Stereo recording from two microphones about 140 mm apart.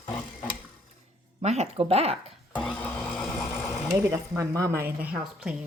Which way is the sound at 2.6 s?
5° left (ahead or behind).